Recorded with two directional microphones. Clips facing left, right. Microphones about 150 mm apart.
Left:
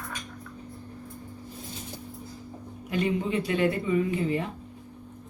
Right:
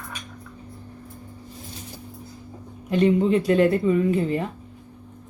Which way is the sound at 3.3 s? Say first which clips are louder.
Right 7 dB; 45° right (ahead or behind).